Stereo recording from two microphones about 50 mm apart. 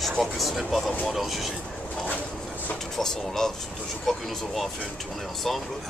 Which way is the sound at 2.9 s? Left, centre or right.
Centre.